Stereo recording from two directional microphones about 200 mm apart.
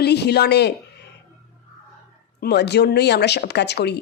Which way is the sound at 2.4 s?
55° left (ahead or behind).